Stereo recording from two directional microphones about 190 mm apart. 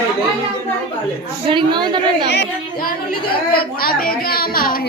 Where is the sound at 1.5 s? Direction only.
25° right (ahead or behind).